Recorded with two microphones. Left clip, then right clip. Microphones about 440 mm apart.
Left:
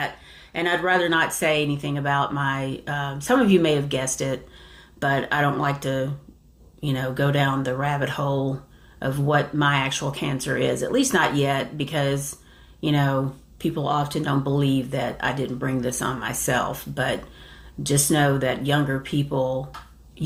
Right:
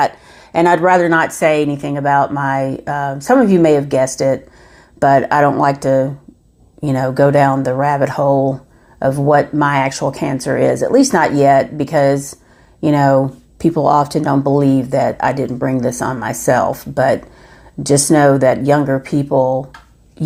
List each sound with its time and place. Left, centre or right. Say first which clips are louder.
0.5 s a woman's voice: right 11 dB; right